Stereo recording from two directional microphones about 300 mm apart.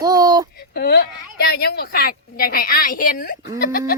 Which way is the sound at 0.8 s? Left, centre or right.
Left.